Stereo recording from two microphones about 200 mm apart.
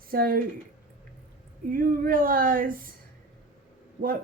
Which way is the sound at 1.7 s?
45° right (ahead or behind).